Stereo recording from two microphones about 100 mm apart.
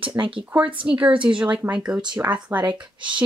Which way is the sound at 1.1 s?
60° right (ahead or behind).